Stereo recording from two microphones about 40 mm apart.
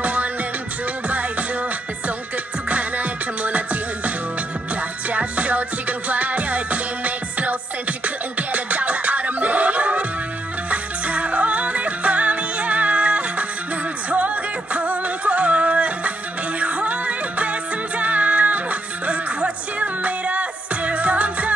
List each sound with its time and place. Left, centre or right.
0.0 s music: right
2.7 s music: right
5.1 s music: right